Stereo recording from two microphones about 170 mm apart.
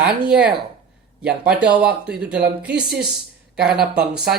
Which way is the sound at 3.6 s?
65° right (ahead or behind).